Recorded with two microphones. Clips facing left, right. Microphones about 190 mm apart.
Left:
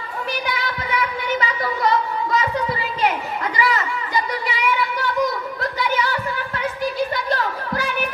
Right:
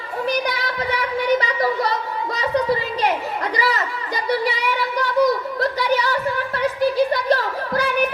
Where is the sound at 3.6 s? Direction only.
40° right (ahead or behind).